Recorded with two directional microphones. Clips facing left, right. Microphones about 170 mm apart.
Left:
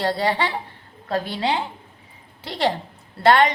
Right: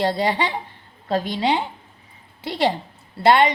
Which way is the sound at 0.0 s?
15° right (ahead or behind).